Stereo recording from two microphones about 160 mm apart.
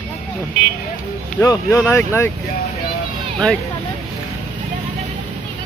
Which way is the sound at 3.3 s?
5° left (ahead or behind).